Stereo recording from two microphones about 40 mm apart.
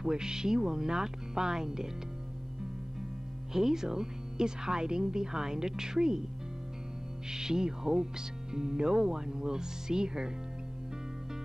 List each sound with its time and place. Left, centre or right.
0.0 s speech: centre
3.5 s speech: centre
7.2 s speech: centre